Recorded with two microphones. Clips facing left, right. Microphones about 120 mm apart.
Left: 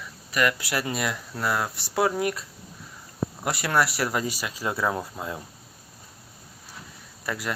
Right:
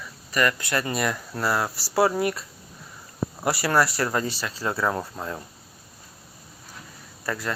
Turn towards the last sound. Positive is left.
turn(degrees=10)  # may be behind; listen again after turning